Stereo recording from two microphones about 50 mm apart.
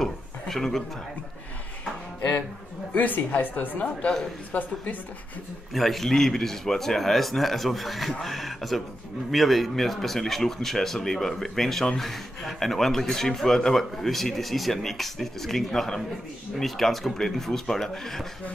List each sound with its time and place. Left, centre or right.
0.0 s a sound: centre
2.9 s a woman's voice: left
5.7 s speech: centre